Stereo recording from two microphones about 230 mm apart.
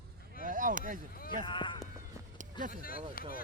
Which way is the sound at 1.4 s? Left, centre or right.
Left.